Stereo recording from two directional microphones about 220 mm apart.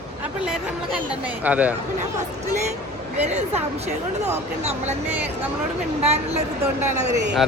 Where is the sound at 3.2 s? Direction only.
30° right (ahead or behind).